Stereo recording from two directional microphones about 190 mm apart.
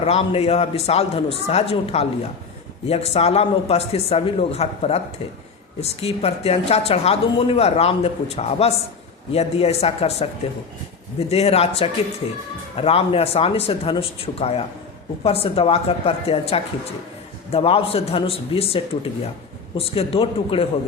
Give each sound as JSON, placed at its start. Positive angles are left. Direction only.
{"t": 0.0, "sound": "a woman's voice", "side_deg": 30}